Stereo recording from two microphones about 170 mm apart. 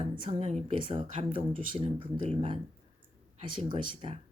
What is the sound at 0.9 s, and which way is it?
Speech, 45° right (ahead or behind).